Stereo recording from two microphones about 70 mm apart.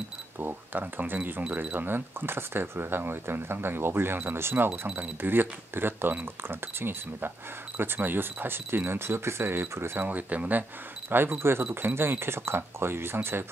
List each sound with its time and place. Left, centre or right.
0.4 s speech: right
4.6 s speech: right
10.0 s speech: right